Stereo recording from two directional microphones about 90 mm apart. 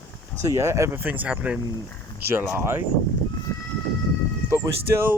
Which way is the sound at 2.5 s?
30° right (ahead or behind).